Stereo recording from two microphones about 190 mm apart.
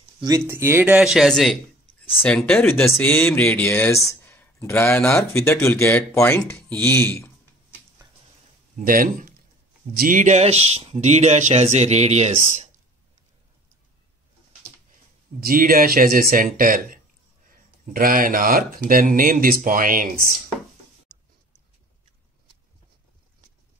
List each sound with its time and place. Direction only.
0.2 s speech: 15° right (ahead or behind); by 7.3 s 10° left (ahead or behind)
8.7 s speech: 45° right (ahead or behind)
15.4 s speech: 50° right (ahead or behind)